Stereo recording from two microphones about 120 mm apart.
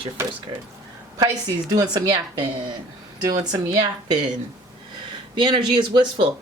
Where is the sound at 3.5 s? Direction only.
35° right (ahead or behind).